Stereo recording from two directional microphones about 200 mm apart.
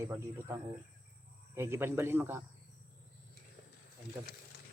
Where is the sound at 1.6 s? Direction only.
10° right (ahead or behind).